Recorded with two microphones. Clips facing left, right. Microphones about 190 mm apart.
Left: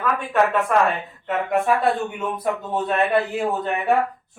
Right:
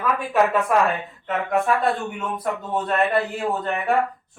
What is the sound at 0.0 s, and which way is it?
A woman's voice, centre (ahead or behind).